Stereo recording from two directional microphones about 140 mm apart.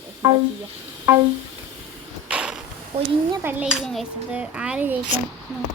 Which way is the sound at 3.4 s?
10° right (ahead or behind).